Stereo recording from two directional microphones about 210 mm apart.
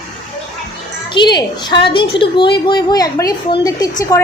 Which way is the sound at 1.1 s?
20° left (ahead or behind).